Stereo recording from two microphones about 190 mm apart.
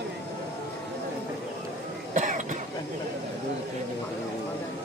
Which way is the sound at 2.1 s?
40° right (ahead or behind).